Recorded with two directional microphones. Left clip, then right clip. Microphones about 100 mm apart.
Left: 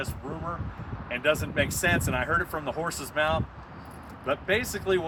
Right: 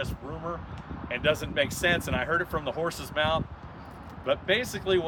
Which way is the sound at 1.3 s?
50° right (ahead or behind).